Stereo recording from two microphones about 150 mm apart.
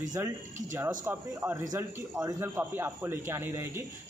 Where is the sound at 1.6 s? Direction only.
25° right (ahead or behind).